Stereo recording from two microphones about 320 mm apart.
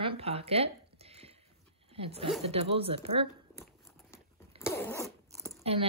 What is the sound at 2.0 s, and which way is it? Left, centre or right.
Speech, centre.